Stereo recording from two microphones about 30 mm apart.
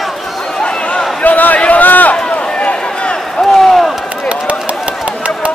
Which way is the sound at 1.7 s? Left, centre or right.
Left.